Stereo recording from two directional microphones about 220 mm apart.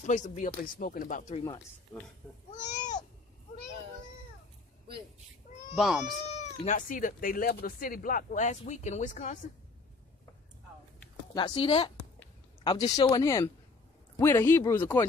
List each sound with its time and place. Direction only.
0.0 s speech: 35° left (ahead or behind)
1.9 s speech: 10° left (ahead or behind)
2.5 s a sound: 35° left (ahead or behind)
5.8 s speech: centre (ahead or behind)
6.6 s speech: 35° left (ahead or behind)
11.3 s speech: 20° left (ahead or behind)